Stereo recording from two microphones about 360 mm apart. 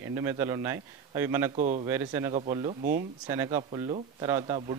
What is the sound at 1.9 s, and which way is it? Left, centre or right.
Speech, centre.